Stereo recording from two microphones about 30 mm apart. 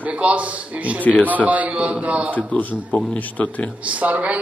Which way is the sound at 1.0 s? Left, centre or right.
Left.